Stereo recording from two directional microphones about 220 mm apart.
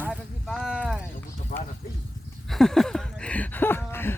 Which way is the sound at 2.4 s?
Centre (ahead or behind).